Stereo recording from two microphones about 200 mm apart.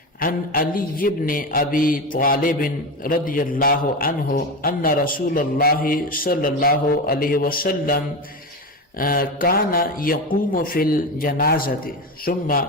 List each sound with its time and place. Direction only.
0.2 s a man's voice: 45° left (ahead or behind)